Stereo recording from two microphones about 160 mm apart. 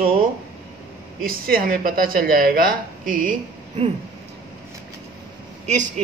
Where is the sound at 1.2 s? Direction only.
65° right (ahead or behind).